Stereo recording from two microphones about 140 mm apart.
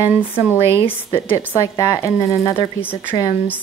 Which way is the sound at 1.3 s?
20° left (ahead or behind).